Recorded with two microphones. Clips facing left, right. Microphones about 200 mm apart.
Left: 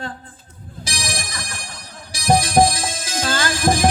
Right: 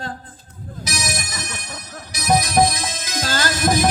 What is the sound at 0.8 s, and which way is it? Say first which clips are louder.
Music: right 1 dB; 30° left (ahead or behind).